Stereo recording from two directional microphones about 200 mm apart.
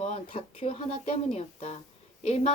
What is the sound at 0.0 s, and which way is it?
A woman's voice, 30° left (ahead or behind).